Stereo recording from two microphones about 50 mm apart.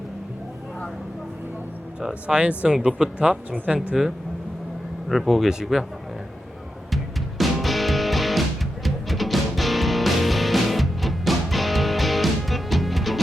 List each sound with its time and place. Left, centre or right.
2.2 s speech: right
2.7 s speech: centre
5.0 s speech: centre
6.9 s music: centre